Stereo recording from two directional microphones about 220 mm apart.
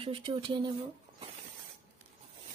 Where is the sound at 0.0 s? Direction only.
25° right (ahead or behind).